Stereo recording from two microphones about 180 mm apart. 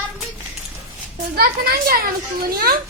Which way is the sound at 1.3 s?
60° right (ahead or behind).